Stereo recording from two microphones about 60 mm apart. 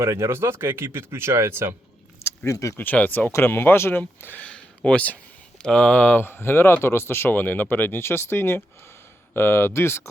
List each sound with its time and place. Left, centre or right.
0.0 s speech: right
2.5 s speech: left
2.7 s speech: left
4.4 s a sound: centre
5.6 s speech: centre
5.9 s speech: left